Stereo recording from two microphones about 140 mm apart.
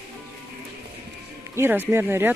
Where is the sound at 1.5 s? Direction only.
15° right (ahead or behind).